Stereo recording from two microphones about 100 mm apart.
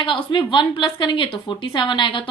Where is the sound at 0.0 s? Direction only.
55° left (ahead or behind).